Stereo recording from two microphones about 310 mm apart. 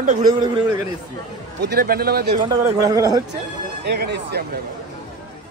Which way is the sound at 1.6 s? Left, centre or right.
Right.